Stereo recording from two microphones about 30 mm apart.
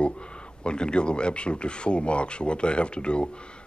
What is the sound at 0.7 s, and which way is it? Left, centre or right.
Speech, left.